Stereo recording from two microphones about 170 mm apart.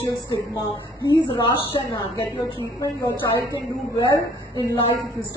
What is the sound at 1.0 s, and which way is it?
A woman's voice, 20° left (ahead or behind).